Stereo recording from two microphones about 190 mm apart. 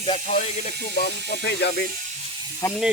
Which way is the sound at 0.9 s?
60° left (ahead or behind).